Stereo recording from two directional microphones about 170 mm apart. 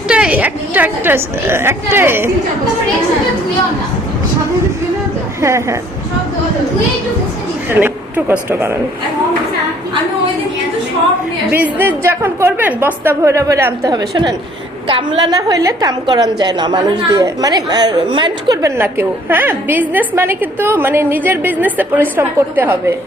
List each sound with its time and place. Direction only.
0.1 s a woman's voice: 5° right (ahead or behind)
5.4 s a woman's voice: 15° right (ahead or behind)
7.7 s a woman's voice: 10° right (ahead or behind)
11.5 s a woman's voice: 10° right (ahead or behind)
18.8 s a woman's voice: 10° right (ahead or behind)